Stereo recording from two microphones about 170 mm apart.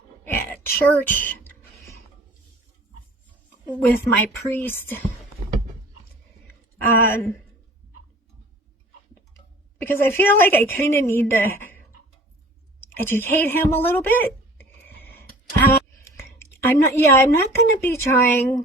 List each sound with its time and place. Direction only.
0.3 s music: 15° left (ahead or behind)
3.7 s a woman's voice: 10° left (ahead or behind)
6.8 s a woman's voice: 15° left (ahead or behind)
9.8 s a woman's voice: 15° left (ahead or behind)
12.8 s a sound: 15° left (ahead or behind)